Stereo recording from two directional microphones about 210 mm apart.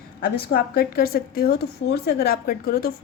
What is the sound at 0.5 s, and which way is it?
A woman's voice, 45° left (ahead or behind).